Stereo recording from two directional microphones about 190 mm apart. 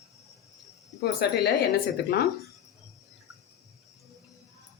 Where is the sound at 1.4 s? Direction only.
55° left (ahead or behind).